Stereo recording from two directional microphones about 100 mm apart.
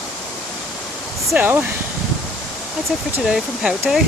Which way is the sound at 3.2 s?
10° right (ahead or behind).